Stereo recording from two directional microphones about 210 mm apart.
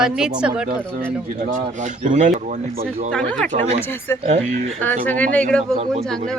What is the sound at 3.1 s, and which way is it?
A man's voice, 5° left (ahead or behind).